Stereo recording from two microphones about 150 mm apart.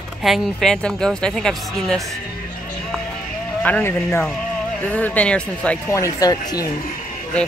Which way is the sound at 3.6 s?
15° left (ahead or behind).